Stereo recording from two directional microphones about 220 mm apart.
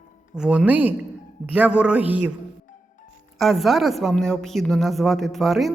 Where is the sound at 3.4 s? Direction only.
Centre (ahead or behind).